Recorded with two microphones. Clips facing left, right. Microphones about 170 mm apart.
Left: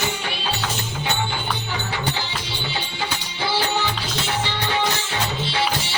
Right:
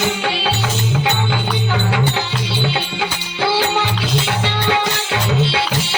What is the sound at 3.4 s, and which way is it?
Music, 70° right (ahead or behind).